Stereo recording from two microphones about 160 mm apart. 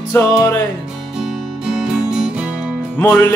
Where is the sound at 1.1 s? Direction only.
5° right (ahead or behind).